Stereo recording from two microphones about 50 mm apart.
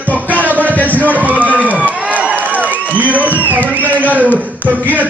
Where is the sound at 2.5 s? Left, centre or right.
Right.